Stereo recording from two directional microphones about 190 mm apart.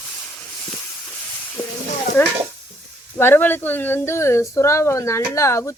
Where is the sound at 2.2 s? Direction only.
10° left (ahead or behind).